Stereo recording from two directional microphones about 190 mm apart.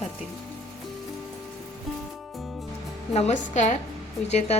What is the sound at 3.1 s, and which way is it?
A woman's voice, 35° left (ahead or behind).